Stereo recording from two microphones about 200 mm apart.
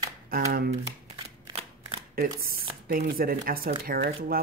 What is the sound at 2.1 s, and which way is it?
Speech, 50° right (ahead or behind).